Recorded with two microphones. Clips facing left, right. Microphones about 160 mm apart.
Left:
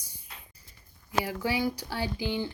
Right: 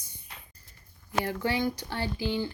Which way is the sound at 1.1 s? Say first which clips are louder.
Even; 10° left (ahead or behind).